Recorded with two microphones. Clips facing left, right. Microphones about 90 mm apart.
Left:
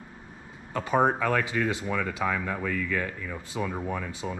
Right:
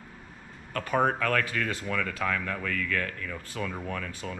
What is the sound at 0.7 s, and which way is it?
Speech, 15° left (ahead or behind).